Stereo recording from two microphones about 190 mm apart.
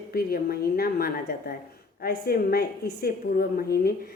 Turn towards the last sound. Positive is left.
turn(degrees=50)  # may be behind; listen again after turning